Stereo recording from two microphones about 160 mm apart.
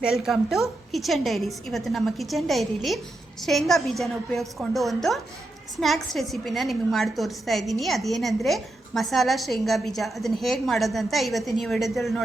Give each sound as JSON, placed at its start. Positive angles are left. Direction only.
{"t": 0.0, "sound": "a woman's voice", "side_deg": -5}